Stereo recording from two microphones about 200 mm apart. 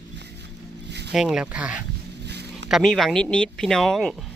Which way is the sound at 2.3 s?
55° right (ahead or behind).